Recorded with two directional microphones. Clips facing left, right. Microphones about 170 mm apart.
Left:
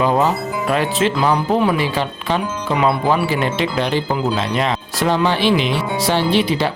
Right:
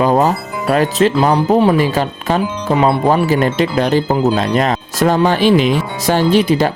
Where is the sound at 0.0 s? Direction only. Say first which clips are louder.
Right 3 dB; 40° right (ahead or behind).